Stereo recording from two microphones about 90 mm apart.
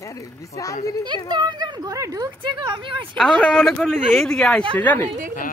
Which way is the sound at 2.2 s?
60° right (ahead or behind).